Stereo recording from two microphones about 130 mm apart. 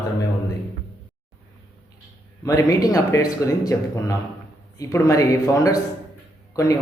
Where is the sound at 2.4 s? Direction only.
25° left (ahead or behind).